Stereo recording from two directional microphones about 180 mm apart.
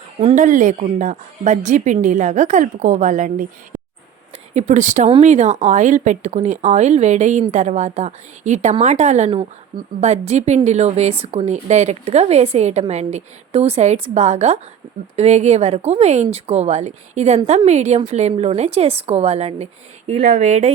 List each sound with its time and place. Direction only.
0.2 s a woman's voice: 35° right (ahead or behind)